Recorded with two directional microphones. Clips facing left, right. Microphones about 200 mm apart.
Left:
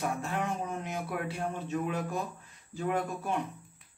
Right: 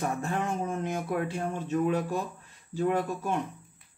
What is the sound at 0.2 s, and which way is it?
Speech, 45° right (ahead or behind).